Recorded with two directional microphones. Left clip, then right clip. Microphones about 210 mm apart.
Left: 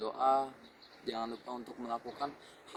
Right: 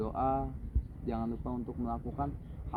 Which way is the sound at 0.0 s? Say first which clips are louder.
Left 2 dB; 15° left (ahead or behind).